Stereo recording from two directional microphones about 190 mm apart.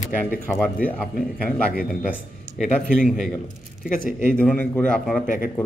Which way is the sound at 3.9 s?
45° left (ahead or behind).